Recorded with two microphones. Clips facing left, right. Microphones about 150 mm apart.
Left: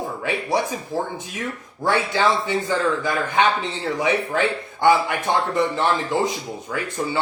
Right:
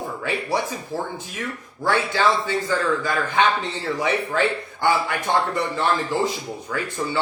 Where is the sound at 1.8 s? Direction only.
20° left (ahead or behind).